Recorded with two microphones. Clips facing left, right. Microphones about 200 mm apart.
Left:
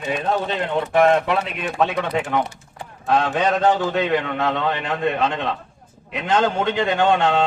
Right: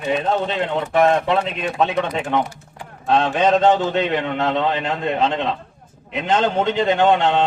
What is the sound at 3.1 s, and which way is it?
A man's voice, 20° right (ahead or behind).